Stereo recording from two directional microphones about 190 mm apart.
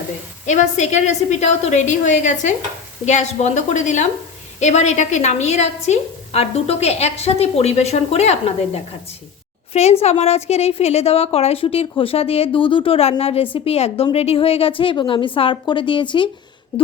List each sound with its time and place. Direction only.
0.4 s a woman's voice: 40° left (ahead or behind)